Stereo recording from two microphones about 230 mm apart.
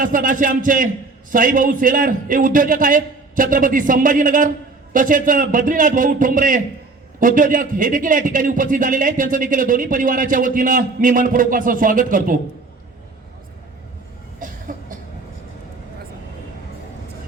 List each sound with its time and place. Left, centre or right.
0.0 s a man's voice: right
14.3 s cough: right